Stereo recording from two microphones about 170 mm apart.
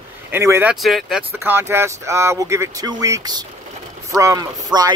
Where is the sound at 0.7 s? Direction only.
Centre (ahead or behind).